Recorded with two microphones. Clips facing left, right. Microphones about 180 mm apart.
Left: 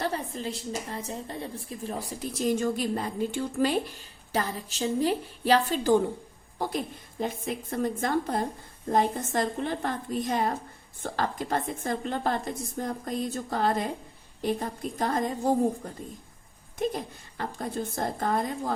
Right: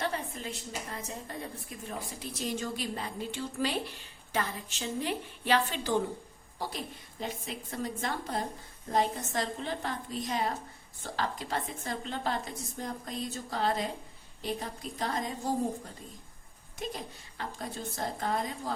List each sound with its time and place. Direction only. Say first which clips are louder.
0.0 s a woman's voice: left 4 dB; 40° left (ahead or behind)
6.6 s a woman's voice: left 7 dB; 50° left (ahead or behind)
16.8 s a woman's voice: left 9 dB; 50° left (ahead or behind)